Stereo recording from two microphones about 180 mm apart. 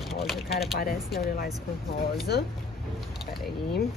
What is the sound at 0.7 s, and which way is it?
Speech, 55° left (ahead or behind).